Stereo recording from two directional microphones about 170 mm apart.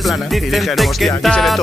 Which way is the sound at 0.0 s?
Centre (ahead or behind).